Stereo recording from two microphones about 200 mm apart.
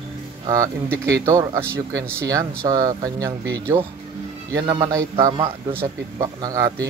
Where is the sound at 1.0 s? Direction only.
15° right (ahead or behind).